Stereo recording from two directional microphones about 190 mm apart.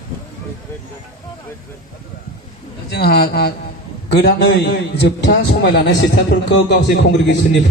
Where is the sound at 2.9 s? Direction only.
55° left (ahead or behind).